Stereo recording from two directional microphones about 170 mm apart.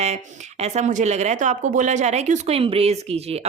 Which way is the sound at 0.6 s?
45° right (ahead or behind).